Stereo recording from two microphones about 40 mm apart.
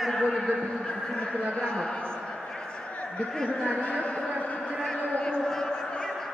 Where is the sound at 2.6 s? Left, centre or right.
Left.